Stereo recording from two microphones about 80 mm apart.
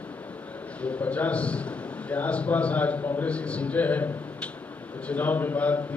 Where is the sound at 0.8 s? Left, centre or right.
Centre.